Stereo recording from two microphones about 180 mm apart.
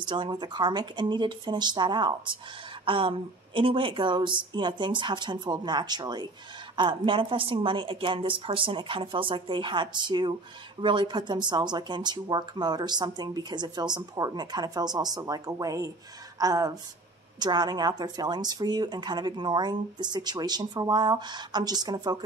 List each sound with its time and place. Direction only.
0.0 s speech: 25° right (ahead or behind)